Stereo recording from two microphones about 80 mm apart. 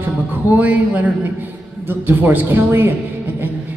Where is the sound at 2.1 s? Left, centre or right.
Right.